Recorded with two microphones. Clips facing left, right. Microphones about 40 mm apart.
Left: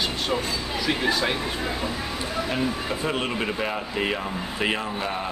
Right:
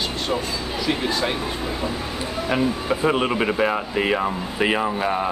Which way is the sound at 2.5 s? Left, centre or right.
Centre.